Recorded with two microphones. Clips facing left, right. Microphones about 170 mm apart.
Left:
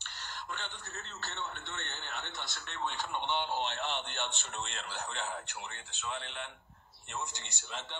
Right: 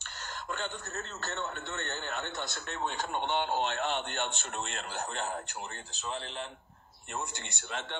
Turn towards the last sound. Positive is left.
turn(degrees=-55)  # may be behind; listen again after turning